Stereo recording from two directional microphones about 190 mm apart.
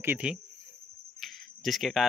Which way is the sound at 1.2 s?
Centre (ahead or behind).